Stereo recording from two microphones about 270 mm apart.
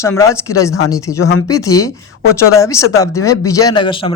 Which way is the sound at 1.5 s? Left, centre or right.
Centre.